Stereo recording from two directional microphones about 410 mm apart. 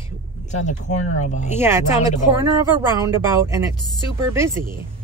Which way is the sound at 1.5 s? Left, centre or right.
Centre.